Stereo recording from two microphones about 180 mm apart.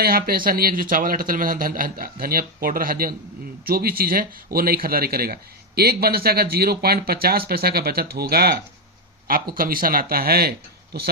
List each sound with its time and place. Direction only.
0.0 s a man's voice: 55° right (ahead or behind)